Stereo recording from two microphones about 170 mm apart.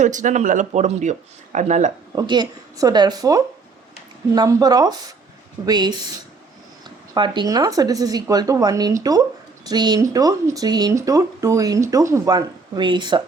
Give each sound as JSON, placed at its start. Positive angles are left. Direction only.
{"t": 0.0, "sound": "speech", "side_deg": -45}
{"t": 2.1, "sound": "speech", "side_deg": -25}
{"t": 7.1, "sound": "speech", "side_deg": -25}